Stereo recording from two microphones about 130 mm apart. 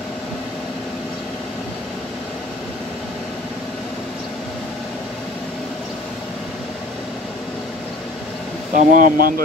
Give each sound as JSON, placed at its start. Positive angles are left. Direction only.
{"t": 8.7, "sound": "speech", "side_deg": -90}